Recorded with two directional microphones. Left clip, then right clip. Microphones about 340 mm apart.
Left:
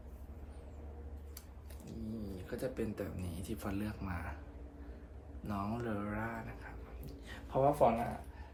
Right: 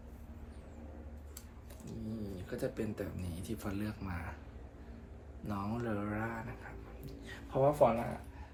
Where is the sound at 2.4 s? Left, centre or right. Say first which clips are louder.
Right 1 dB; centre.